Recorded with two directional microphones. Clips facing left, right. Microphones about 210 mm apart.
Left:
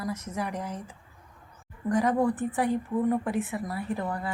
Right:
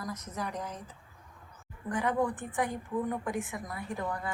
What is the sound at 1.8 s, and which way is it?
A woman's voice, 40° left (ahead or behind).